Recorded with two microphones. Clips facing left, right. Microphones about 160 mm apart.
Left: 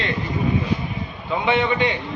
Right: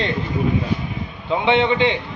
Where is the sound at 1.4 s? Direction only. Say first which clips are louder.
Right 3 dB; 20° right (ahead or behind).